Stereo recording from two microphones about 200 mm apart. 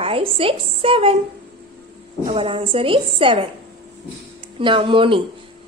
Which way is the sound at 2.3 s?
25° right (ahead or behind).